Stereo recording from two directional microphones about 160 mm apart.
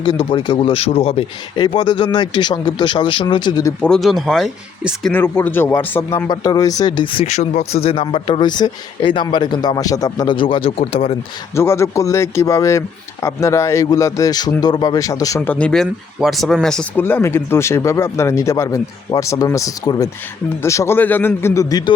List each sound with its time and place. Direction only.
0.0 s a man's voice: 30° left (ahead or behind)
3.8 s speech: 5° left (ahead or behind)
5.1 s speech: 15° left (ahead or behind); by 11.2 s 35° left (ahead or behind)
11.5 s speech: 15° left (ahead or behind)
15.4 s speech: 10° left (ahead or behind); by 21.9 s 25° left (ahead or behind)